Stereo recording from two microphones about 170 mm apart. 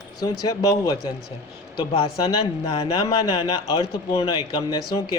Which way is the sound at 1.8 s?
35° left (ahead or behind).